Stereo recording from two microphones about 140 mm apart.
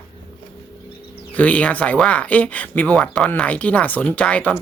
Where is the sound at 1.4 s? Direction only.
10° left (ahead or behind).